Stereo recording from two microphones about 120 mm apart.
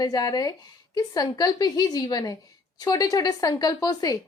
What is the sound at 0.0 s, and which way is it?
A woman's voice, 30° left (ahead or behind).